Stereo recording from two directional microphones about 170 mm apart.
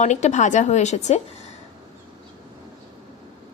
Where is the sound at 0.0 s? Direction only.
45° left (ahead or behind).